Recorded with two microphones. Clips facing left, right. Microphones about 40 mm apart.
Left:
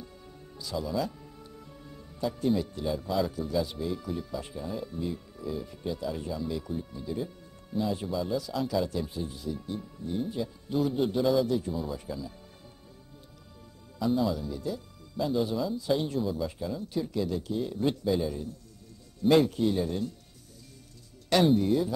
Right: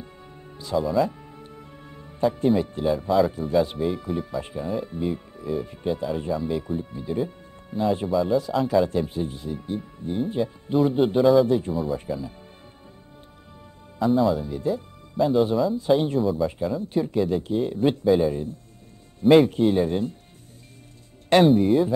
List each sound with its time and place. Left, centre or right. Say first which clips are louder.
0.0 s music: right 4 dB; right
3.3 s speech: right 8 dB; right
8.1 s speech: right 9 dB; centre
8.4 s speech: right 8 dB; right
11.7 s speech: right 8 dB; centre
14.0 s speech: right 7 dB; centre
14.3 s speech: right 8 dB; right
15.2 s speech: right 9 dB; centre
15.8 s speech: right 8 dB; right
16.2 s speech: right 8 dB; centre
16.4 s speech: right 8 dB; right
21.5 s speech: right 7 dB; right